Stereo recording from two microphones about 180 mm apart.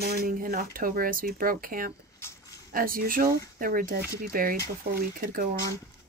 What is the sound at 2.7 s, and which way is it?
Speech, 50° right (ahead or behind).